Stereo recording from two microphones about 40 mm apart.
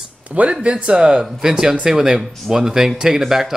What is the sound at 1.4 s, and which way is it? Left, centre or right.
Speech, centre.